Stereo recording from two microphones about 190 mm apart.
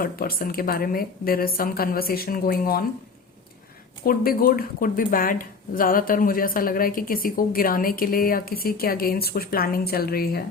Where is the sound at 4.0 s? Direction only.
50° left (ahead or behind).